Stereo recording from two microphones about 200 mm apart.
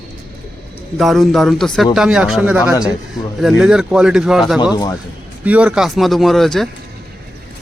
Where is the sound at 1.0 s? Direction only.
Centre (ahead or behind).